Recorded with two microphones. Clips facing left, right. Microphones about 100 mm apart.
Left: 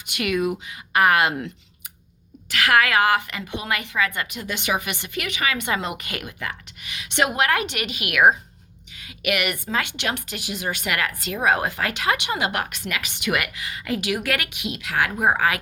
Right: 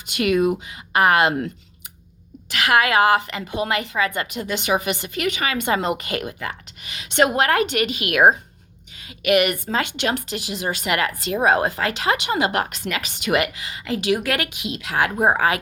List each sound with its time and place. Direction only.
0.1 s a woman's voice: 35° right (ahead or behind)
2.5 s a woman's voice: 20° right (ahead or behind)